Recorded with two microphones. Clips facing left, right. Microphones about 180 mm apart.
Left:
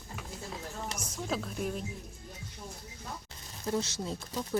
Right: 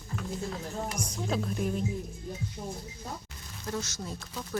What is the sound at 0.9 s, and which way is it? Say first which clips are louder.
Speech: right 2 dB; centre (ahead or behind).